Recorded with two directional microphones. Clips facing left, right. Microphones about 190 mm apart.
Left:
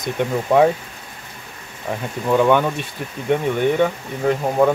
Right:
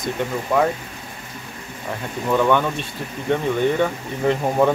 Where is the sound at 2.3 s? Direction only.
15° left (ahead or behind).